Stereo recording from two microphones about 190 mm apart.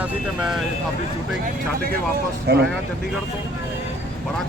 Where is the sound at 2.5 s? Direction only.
60° right (ahead or behind).